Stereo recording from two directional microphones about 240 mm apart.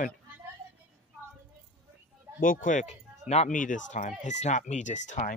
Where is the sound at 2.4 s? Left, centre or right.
Left.